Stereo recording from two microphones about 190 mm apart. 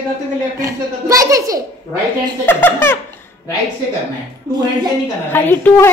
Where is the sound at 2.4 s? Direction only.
10° left (ahead or behind).